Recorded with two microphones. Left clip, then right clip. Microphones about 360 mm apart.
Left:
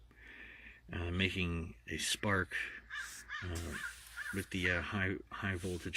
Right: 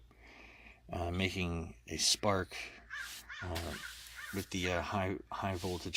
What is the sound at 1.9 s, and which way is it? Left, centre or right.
Speech, centre.